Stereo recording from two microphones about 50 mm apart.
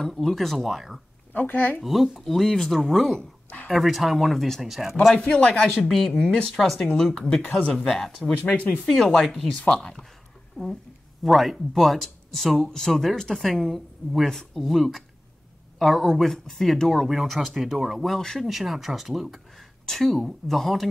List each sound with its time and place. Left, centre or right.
0.0 s speech: centre
1.3 s speech: left
1.8 s speech: centre
5.3 s speech: centre
5.9 s speech: centre
6.1 s speech: centre